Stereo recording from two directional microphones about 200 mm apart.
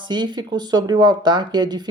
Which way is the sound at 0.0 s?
20° right (ahead or behind).